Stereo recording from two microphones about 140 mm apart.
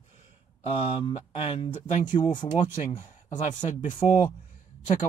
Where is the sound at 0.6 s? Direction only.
45° left (ahead or behind).